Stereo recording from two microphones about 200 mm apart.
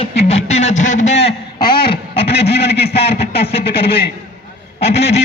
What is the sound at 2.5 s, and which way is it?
Speech, 55° left (ahead or behind).